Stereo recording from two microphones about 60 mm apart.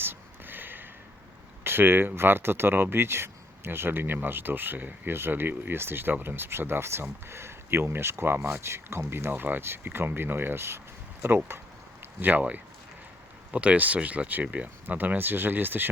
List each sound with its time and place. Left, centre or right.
0.0 s a sound: right
1.6 s speech: right
12.2 s speech: right